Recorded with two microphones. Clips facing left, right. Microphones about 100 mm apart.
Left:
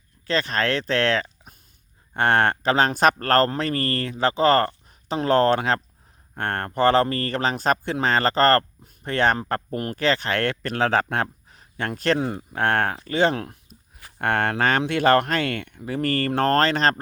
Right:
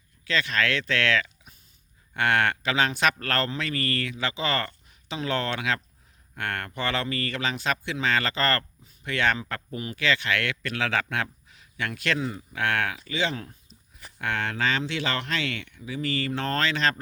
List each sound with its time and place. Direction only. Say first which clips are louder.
0.3 s speech: left 3 dB; 40° left (ahead or behind)
12.2 s speech: left 5 dB; 55° left (ahead or behind)